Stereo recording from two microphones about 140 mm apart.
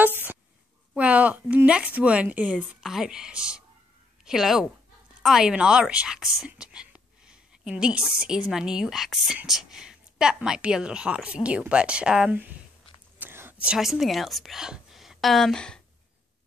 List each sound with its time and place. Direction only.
0.9 s a woman's voice: 10° right (ahead or behind)
13.2 s whispering: 15° right (ahead or behind)
13.7 s a woman's voice: centre (ahead or behind)